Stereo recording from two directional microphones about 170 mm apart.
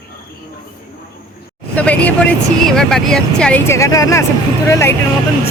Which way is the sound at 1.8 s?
10° left (ahead or behind).